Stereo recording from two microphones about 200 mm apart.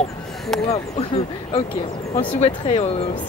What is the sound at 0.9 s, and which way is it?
Speech, 30° left (ahead or behind).